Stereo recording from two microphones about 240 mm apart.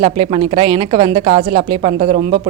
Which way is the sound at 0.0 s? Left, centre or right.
Right.